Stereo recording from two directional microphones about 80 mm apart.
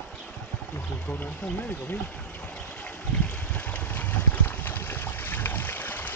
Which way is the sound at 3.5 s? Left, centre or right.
Left.